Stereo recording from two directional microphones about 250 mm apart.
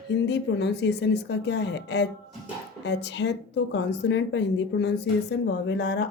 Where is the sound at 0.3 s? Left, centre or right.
Left.